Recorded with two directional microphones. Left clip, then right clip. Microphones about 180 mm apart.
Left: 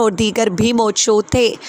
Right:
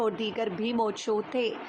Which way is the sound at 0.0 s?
50° left (ahead or behind).